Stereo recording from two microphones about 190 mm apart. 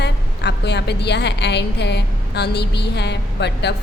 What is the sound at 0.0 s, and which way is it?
A woman's voice, 65° left (ahead or behind).